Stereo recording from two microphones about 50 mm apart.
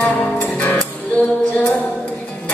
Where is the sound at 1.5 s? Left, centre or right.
Left.